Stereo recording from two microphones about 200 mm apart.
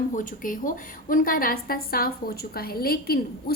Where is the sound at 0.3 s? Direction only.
40° left (ahead or behind).